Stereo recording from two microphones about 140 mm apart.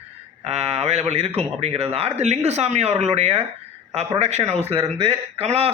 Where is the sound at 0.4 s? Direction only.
45° right (ahead or behind).